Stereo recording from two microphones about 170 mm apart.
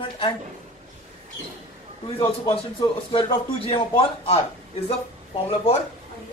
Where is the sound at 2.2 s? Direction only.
25° left (ahead or behind).